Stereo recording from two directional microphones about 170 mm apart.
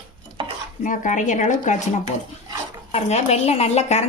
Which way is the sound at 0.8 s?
50° left (ahead or behind).